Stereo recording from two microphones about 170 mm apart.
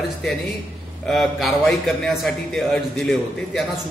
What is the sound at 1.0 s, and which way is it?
A man's voice, centre (ahead or behind).